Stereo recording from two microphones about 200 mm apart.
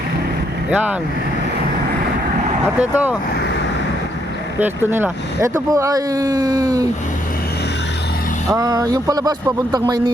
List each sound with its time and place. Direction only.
0.7 s speech: 5° right (ahead or behind)
2.7 s speech: 10° right (ahead or behind)
4.9 s speech: 10° right (ahead or behind)
8.4 s speech: 20° right (ahead or behind)